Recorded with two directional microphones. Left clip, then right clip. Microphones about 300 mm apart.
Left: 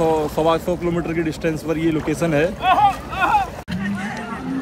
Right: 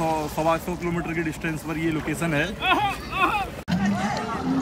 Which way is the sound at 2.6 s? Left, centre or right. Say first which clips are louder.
Left 7 dB; left.